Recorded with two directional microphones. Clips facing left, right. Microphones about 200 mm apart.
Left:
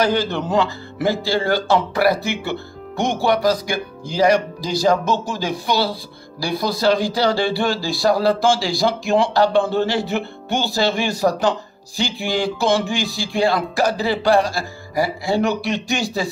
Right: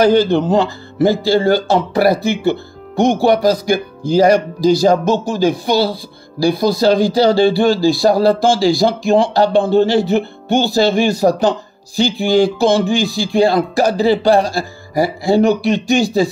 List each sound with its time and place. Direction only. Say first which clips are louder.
0.0 s speech: right 8 dB; 30° right (ahead or behind)
5.4 s speech: right 7 dB; 50° right (ahead or behind)
13.9 s speech: right 6 dB; 30° right (ahead or behind)